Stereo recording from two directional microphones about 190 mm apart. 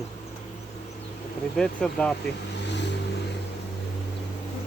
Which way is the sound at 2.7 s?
65° left (ahead or behind).